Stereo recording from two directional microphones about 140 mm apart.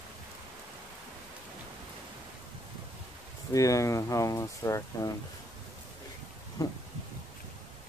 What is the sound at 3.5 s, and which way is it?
Speech, 25° left (ahead or behind).